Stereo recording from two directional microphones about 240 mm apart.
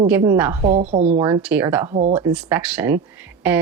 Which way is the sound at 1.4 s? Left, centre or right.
Centre.